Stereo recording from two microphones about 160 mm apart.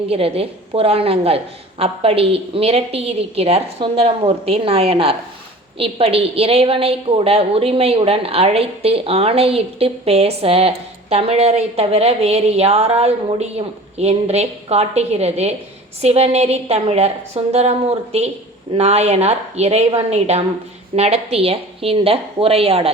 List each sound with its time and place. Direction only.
0.1 s a woman's voice: 35° right (ahead or behind)